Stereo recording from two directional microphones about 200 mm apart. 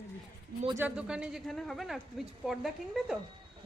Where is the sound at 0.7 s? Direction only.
5° right (ahead or behind).